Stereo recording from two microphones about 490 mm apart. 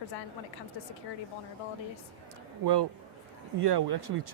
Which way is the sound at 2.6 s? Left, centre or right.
Right.